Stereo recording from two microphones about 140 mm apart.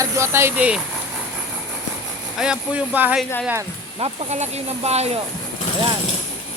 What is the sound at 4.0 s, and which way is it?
Speech, 55° right (ahead or behind).